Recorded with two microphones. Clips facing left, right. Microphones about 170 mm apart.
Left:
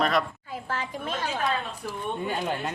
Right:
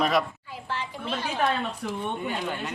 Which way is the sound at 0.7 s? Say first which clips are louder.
Even; 50° left (ahead or behind).